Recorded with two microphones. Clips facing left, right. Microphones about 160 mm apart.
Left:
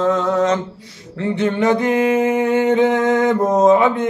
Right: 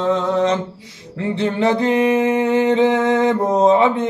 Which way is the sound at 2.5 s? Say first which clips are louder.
Even; 25° right (ahead or behind).